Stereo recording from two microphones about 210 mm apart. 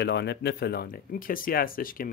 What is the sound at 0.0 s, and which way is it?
Speech, 55° left (ahead or behind).